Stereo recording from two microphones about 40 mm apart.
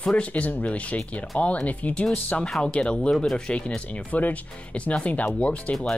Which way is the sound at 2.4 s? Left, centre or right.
Centre.